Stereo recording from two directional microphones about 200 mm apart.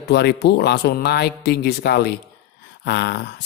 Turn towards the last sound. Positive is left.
turn(degrees=55)  # may be behind; listen again after turning